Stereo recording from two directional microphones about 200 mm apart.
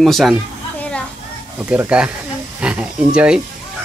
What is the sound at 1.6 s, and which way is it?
Speech, 5° right (ahead or behind).